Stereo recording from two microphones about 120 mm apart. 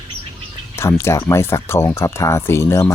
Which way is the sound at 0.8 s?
20° left (ahead or behind).